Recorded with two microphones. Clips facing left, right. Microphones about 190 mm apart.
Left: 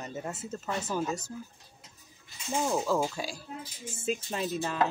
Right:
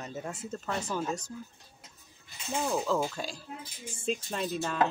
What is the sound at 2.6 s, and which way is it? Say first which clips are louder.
Speech: left 1 dB; 25° left (ahead or behind).